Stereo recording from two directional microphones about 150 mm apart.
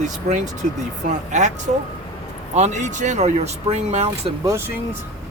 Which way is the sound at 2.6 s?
50° right (ahead or behind).